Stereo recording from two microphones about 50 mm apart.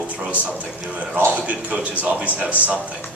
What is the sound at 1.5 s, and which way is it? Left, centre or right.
A man's voice, right.